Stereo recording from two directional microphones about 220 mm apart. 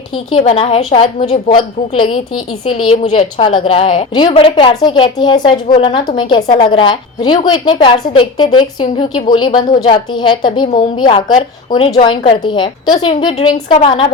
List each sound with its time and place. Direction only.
0.3 s a woman's voice: 25° left (ahead or behind)